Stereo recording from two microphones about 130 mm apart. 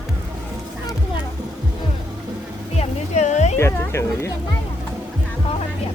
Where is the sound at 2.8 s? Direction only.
60° left (ahead or behind).